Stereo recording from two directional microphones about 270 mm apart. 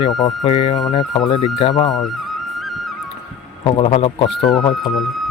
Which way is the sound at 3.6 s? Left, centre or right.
Left.